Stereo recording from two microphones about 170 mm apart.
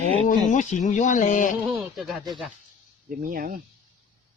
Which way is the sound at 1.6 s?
Centre (ahead or behind).